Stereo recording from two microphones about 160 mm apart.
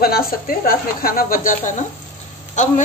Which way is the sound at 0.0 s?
70° left (ahead or behind).